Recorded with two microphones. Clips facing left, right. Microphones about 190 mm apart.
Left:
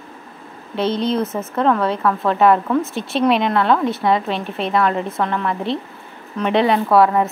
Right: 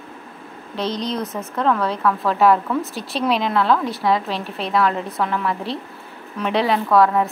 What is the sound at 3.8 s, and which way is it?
Speech, 25° left (ahead or behind).